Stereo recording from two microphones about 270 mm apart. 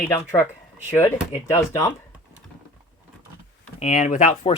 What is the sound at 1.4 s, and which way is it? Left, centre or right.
Speech, centre.